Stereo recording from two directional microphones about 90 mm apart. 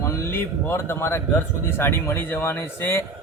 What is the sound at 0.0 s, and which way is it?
A man's voice, 30° left (ahead or behind).